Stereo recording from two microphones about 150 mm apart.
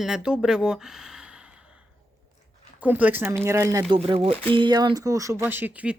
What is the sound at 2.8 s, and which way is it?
A woman's voice, 10° right (ahead or behind).